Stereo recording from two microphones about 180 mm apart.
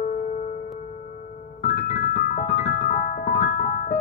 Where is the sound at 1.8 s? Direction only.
40° left (ahead or behind).